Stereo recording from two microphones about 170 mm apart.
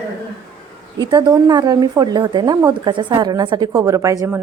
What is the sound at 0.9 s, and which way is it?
A woman's voice, 25° right (ahead or behind).